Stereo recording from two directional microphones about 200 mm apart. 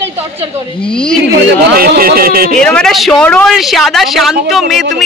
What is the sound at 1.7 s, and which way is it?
Speech, 50° right (ahead or behind).